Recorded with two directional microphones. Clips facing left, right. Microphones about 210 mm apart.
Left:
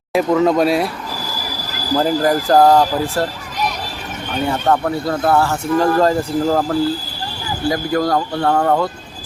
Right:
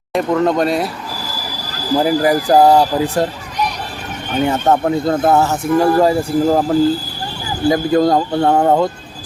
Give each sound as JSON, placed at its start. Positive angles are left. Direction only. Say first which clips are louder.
{"t": 0.1, "sound": "speech", "louder": "left 1 dB", "side_deg": 0}
{"t": 2.0, "sound": "speech", "louder": "right 2 dB", "side_deg": -10}
{"t": 4.4, "sound": "speech", "louder": "right 2 dB", "side_deg": -20}
{"t": 7.7, "sound": "speech", "louder": "right 5 dB", "side_deg": -20}